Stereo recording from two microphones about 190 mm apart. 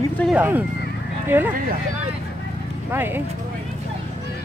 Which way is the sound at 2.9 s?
10° right (ahead or behind).